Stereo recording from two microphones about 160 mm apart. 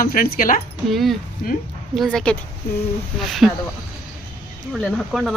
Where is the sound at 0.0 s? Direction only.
60° left (ahead or behind).